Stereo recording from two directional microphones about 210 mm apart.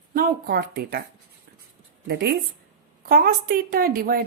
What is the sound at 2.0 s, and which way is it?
A woman's voice, 50° right (ahead or behind).